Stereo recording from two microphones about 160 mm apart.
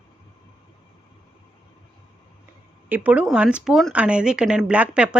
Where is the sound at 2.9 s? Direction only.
10° right (ahead or behind).